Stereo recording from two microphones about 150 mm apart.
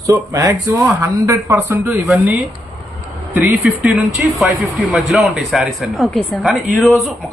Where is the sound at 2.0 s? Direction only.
5° right (ahead or behind).